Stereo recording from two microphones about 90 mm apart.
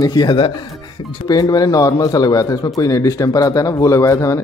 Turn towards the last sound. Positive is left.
turn(degrees=35)  # may be behind; listen again after turning